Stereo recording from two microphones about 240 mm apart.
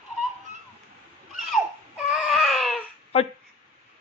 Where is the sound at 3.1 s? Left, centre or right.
Left.